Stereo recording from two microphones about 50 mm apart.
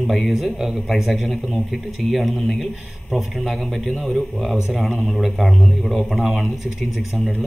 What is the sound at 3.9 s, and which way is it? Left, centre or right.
Speech, left.